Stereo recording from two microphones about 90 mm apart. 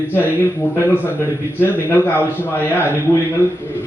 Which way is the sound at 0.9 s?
20° left (ahead or behind).